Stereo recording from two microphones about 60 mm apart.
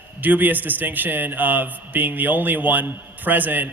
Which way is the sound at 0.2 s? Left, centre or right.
Right.